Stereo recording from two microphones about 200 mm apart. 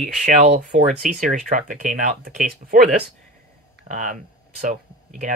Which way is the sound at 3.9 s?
40° right (ahead or behind).